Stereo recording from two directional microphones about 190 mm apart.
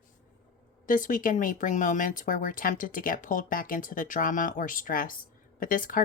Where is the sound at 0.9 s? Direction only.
45° left (ahead or behind).